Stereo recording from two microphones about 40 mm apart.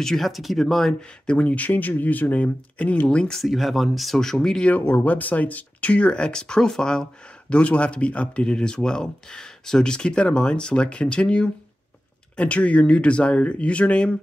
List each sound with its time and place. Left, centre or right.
0.0 s speech: centre
1.4 s speech: left
3.4 s speech: centre
4.2 s speech: centre
4.7 s speech: left; by 7.1 s centre
7.4 s speech: left
8.5 s speech: left